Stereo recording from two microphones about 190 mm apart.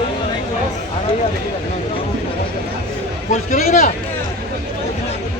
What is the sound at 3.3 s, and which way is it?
Speech, 45° left (ahead or behind).